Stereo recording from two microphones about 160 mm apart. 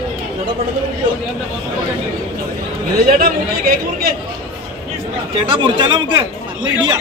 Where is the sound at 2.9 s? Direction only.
65° right (ahead or behind).